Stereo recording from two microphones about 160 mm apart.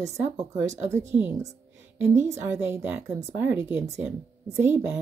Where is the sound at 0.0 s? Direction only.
20° right (ahead or behind).